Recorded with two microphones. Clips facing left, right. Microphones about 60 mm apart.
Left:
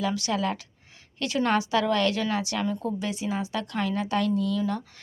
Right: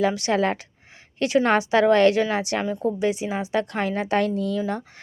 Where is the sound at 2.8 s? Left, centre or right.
Right.